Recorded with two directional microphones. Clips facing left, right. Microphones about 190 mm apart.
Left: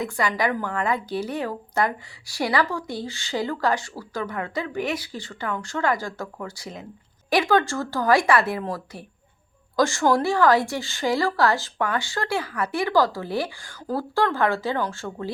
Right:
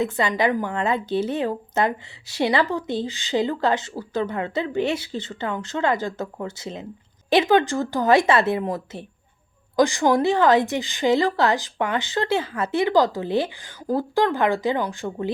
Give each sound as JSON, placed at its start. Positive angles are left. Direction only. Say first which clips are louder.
{"t": 0.0, "sound": "a woman's voice", "louder": "right 3 dB", "side_deg": -25}